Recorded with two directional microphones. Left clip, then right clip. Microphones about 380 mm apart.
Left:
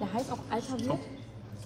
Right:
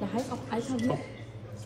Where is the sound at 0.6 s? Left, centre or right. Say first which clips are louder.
Right 5 dB; centre.